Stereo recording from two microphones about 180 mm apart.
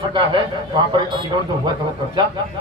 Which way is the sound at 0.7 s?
25° right (ahead or behind).